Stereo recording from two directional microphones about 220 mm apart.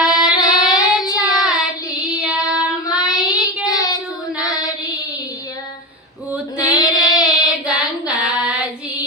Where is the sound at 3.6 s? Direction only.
15° left (ahead or behind).